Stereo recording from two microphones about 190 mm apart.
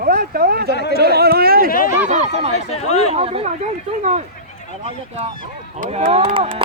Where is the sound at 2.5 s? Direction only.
35° left (ahead or behind).